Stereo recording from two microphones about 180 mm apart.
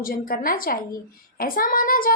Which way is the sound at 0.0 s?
55° left (ahead or behind).